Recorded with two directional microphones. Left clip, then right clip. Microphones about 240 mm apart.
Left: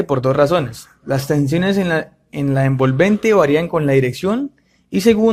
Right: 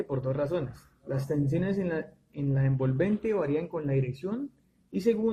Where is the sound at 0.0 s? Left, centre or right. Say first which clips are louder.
Left 16 dB; left.